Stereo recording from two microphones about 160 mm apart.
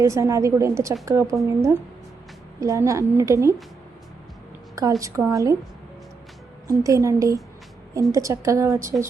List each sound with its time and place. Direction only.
0.0 s a woman's voice: 20° right (ahead or behind)
2.6 s a woman's voice: 20° right (ahead or behind)
4.7 s a woman's voice: 20° right (ahead or behind)
6.7 s a woman's voice: 20° right (ahead or behind)